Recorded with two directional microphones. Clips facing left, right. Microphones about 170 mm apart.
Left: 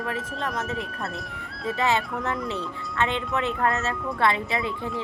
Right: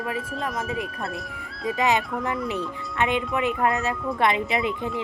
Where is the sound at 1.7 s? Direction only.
15° right (ahead or behind).